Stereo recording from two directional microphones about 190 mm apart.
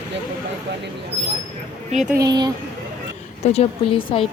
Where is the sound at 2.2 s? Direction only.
20° right (ahead or behind).